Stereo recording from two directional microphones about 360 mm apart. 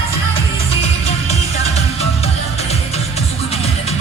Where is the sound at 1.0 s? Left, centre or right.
Centre.